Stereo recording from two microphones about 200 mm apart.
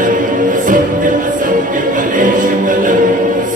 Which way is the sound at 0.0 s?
40° right (ahead or behind).